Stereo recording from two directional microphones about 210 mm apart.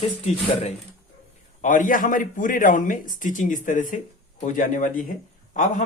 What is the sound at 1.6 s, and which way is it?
A man's voice, 40° left (ahead or behind).